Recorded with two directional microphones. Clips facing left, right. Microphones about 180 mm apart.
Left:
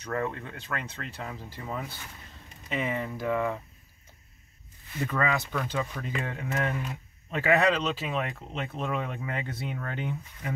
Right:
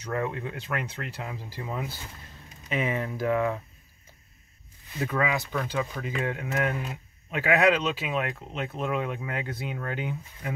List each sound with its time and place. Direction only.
0.1 s speech: 15° right (ahead or behind)
1.5 s speech: centre (ahead or behind)
5.0 s speech: 10° right (ahead or behind)